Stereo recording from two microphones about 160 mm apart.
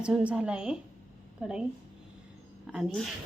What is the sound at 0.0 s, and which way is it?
Speech, 5° right (ahead or behind).